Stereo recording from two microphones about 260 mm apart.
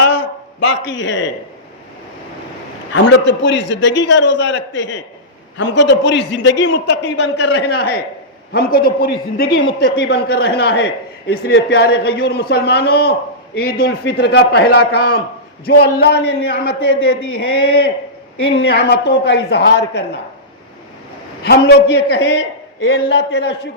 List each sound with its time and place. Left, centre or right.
0.6 s a man's voice: left
2.9 s a man's voice: left
18.4 s a man's voice: left
21.4 s a man's voice: left